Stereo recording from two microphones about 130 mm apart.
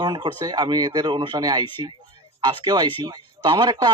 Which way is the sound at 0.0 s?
40° right (ahead or behind).